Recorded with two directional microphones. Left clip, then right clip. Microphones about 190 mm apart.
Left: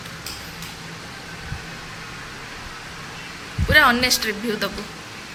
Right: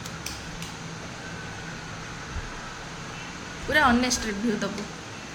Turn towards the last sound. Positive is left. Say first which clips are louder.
# left 5 dB
turn(degrees=0)  # may be behind; listen again after turning